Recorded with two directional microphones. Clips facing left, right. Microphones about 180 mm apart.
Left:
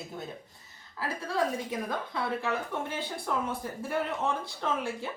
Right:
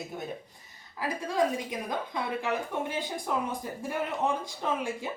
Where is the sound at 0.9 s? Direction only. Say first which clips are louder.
Right 2 dB; 15° right (ahead or behind).